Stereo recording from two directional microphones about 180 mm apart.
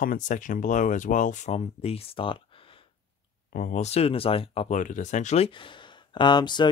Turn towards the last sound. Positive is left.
turn(degrees=25)  # may be behind; listen again after turning